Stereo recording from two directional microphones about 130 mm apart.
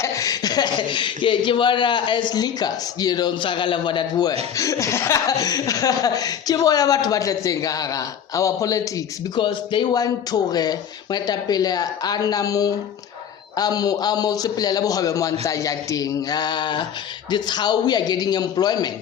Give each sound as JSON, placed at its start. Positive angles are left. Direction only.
{"t": 0.0, "sound": "speech", "side_deg": 25}